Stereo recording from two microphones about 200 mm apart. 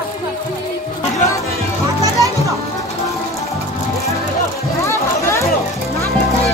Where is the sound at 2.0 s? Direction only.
15° right (ahead or behind).